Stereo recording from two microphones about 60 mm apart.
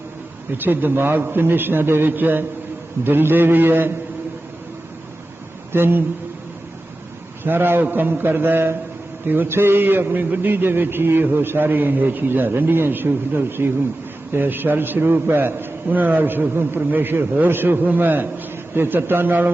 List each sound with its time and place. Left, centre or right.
0.5 s a man's voice: right
5.7 s a man's voice: right
7.4 s a man's voice: right